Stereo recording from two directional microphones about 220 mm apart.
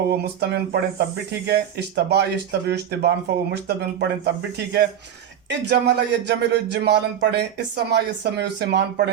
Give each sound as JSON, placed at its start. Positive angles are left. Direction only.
{"t": 0.3, "sound": "speech", "side_deg": -50}